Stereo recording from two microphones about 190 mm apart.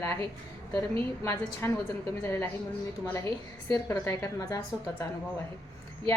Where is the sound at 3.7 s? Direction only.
15° left (ahead or behind).